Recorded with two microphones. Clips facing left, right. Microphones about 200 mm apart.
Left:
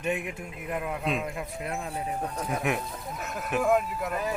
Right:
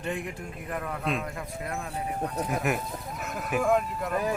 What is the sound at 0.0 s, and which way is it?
Speech, 10° left (ahead or behind).